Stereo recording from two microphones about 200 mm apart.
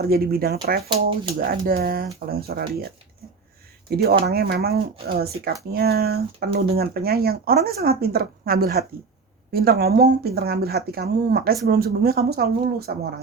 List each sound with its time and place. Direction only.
0.0 s speech: 50° right (ahead or behind)
3.8 s speech: 50° right (ahead or behind)